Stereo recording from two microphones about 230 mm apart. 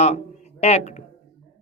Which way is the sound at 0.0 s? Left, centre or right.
Left.